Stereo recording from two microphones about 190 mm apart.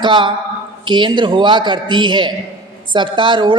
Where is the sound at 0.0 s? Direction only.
25° right (ahead or behind).